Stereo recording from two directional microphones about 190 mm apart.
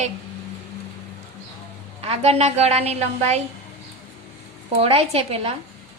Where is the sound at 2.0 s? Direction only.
35° right (ahead or behind).